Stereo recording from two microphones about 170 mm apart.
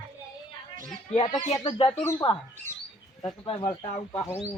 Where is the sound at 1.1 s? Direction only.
25° left (ahead or behind).